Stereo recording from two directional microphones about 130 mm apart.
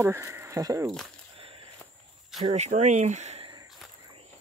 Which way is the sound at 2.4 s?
60° right (ahead or behind).